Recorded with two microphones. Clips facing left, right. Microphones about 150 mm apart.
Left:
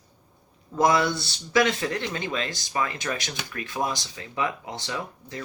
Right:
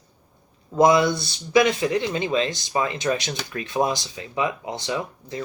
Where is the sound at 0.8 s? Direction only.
20° right (ahead or behind).